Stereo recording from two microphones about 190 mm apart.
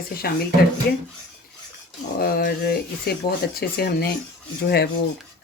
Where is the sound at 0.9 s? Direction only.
60° left (ahead or behind).